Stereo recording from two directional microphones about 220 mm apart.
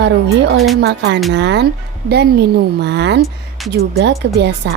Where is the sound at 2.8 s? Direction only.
50° right (ahead or behind).